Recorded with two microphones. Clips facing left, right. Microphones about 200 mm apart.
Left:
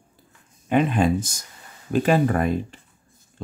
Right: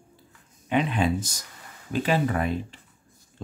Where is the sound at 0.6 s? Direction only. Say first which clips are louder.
Left 4 dB; 45° left (ahead or behind).